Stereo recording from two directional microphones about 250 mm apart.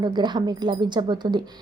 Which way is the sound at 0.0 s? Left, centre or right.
Centre.